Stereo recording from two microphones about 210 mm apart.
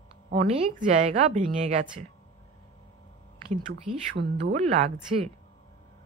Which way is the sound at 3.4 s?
35° right (ahead or behind).